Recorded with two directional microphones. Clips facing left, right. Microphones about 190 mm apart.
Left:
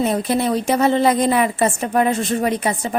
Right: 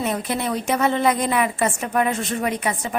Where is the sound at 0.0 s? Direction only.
35° left (ahead or behind).